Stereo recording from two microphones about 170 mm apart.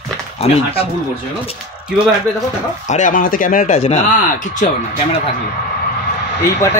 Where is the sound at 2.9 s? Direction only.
45° left (ahead or behind).